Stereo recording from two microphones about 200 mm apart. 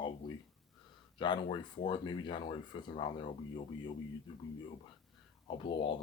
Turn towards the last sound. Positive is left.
turn(degrees=25)  # may be behind; listen again after turning